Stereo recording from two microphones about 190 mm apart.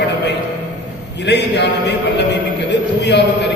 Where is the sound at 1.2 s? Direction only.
65° left (ahead or behind).